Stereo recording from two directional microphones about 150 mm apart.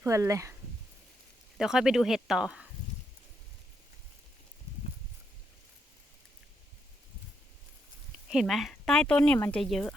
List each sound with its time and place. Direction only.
0.0 s speech: 20° right (ahead or behind)
1.5 s speech: 5° right (ahead or behind)
8.3 s speech: centre (ahead or behind)